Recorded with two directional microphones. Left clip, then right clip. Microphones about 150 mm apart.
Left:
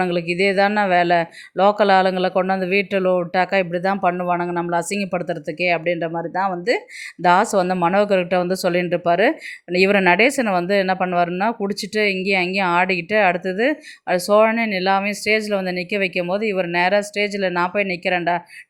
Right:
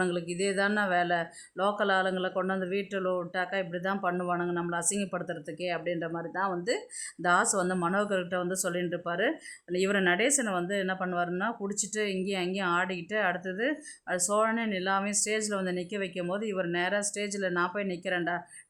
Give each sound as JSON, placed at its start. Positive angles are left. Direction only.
{"t": 0.0, "sound": "speech", "side_deg": 25}